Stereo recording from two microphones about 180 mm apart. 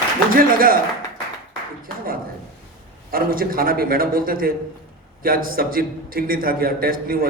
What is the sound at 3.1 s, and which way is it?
A man's voice, 55° right (ahead or behind).